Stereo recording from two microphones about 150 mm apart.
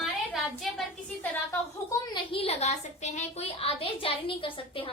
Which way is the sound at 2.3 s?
40° left (ahead or behind).